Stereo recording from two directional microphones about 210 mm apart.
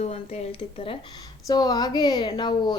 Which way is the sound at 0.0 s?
30° left (ahead or behind).